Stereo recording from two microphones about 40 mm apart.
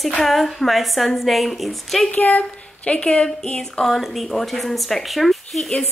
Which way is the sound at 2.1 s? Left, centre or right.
Left.